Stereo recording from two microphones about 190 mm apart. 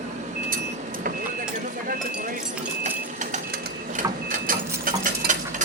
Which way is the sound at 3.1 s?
40° right (ahead or behind).